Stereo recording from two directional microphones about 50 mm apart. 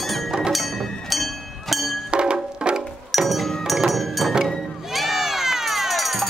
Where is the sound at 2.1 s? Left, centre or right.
Right.